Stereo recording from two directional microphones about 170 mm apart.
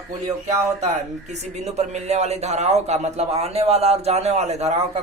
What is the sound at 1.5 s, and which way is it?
A man's voice, 40° right (ahead or behind).